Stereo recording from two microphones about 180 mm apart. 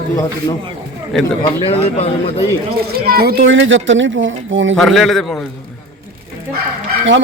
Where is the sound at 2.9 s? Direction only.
55° right (ahead or behind); by 4.7 s 90° right.